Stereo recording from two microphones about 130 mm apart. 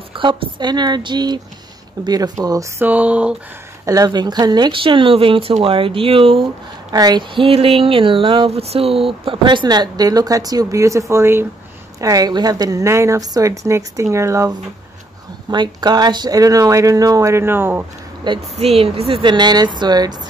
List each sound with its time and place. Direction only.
0.1 s speech: 40° right (ahead or behind)
2.8 s speech: 10° right (ahead or behind)
3.8 s speech: 30° right (ahead or behind); by 6.4 s 45° right (ahead or behind)
6.9 s speech: 30° right (ahead or behind)
15.5 s speech: 35° right (ahead or behind); by 17.8 s 15° right (ahead or behind)
18.3 s speech: 35° right (ahead or behind)
18.6 s speech: 50° right (ahead or behind); by 20.2 s 30° right (ahead or behind)